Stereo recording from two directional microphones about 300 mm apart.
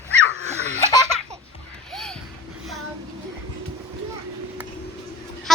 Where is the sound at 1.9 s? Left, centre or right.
Centre.